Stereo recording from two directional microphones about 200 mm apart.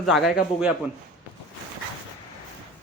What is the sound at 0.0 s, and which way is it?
Speech, centre (ahead or behind).